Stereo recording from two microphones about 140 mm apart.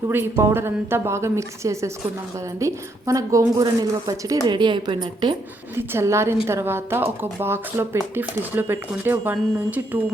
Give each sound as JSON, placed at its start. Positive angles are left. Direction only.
{"t": 0.1, "sound": "a woman's voice", "side_deg": -15}
{"t": 5.7, "sound": "speech", "side_deg": -20}